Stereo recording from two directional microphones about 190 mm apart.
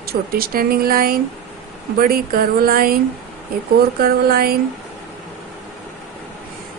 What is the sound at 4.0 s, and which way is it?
Speech, 55° right (ahead or behind).